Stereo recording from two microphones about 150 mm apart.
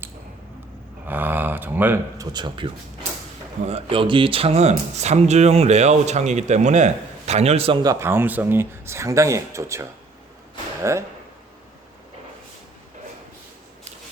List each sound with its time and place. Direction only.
1.0 s speech: 10° right (ahead or behind)
2.3 s speech: 30° right (ahead or behind)
7.8 s speech: 20° right (ahead or behind)